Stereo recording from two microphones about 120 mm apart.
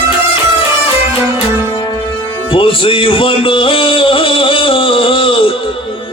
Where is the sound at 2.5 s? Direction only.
45° left (ahead or behind).